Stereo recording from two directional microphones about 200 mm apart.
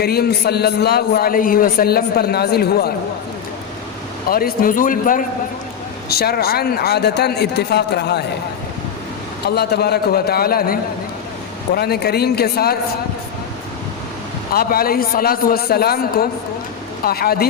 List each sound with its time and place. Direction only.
0.0 s a man's voice: 50° left (ahead or behind)
4.3 s a man's voice: 50° left (ahead or behind)
9.6 s a man's voice: 55° left (ahead or behind)
14.5 s a man's voice: 50° left (ahead or behind)